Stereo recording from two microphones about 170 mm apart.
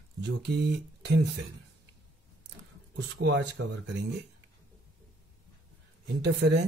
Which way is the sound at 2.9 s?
90° right.